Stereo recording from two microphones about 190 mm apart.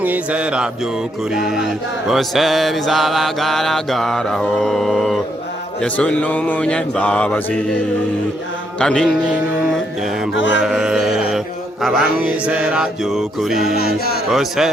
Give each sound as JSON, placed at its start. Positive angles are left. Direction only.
{"t": 0.0, "sound": "music", "side_deg": -5}
{"t": 1.3, "sound": "mantra", "side_deg": 0}
{"t": 8.8, "sound": "mantra", "side_deg": 5}
{"t": 10.3, "sound": "mantra", "side_deg": 70}
{"t": 10.6, "sound": "mantra", "side_deg": -5}
{"t": 13.7, "sound": "speech", "side_deg": 55}
{"t": 14.3, "sound": "mantra", "side_deg": 0}